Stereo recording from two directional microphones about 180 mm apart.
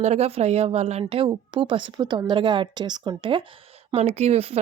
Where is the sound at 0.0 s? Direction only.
35° right (ahead or behind).